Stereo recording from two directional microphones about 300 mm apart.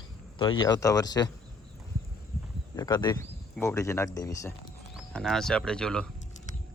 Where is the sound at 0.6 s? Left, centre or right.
Centre.